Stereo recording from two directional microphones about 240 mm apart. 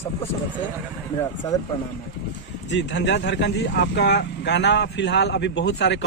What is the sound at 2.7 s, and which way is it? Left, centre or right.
Speech, left.